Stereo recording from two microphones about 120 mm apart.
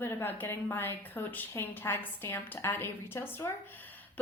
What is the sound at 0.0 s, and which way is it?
A woman's voice, 15° left (ahead or behind).